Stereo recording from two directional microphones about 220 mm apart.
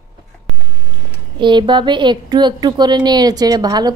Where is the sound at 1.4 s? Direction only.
20° right (ahead or behind).